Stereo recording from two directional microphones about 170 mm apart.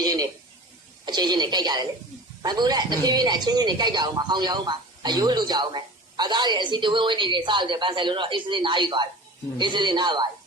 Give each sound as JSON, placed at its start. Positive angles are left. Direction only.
{"t": 1.0, "sound": "a man's voice", "side_deg": -25}